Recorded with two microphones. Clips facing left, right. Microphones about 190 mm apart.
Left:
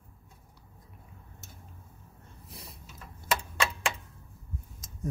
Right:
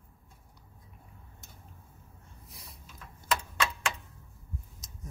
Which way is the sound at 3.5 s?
10° left (ahead or behind).